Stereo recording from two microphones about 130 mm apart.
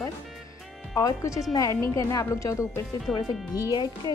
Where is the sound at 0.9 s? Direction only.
25° left (ahead or behind).